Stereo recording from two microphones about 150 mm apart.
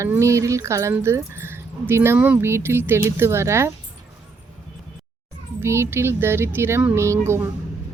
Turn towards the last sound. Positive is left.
turn(degrees=-15)  # may be behind; listen again after turning